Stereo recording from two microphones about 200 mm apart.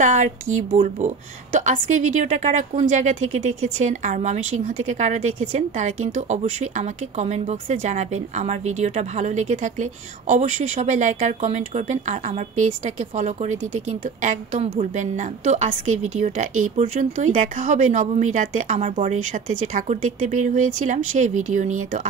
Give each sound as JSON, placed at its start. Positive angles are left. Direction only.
{"t": 0.0, "sound": "a woman's voice", "side_deg": -35}